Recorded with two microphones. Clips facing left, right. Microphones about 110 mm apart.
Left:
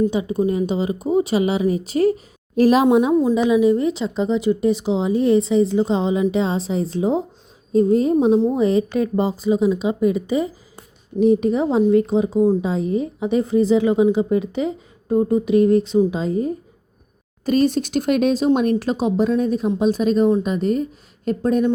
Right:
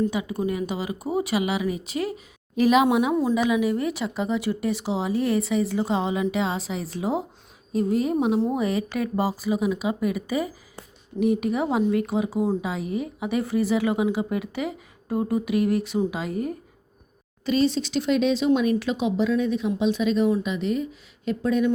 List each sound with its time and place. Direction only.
0.1 s speech: 30° left (ahead or behind)
17.4 s speech: 45° left (ahead or behind)